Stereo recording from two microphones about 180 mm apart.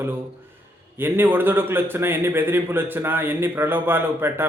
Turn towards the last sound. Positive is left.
turn(degrees=-10)  # may be behind; listen again after turning